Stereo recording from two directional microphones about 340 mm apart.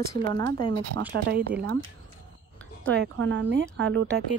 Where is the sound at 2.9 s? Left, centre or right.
Right.